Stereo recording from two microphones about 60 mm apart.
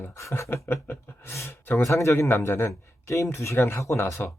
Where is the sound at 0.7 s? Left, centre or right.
Left.